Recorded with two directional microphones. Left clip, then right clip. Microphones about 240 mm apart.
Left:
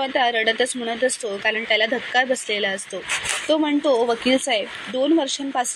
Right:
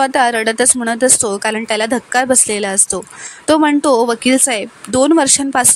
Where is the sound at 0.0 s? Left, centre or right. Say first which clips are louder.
Right 7 dB; right.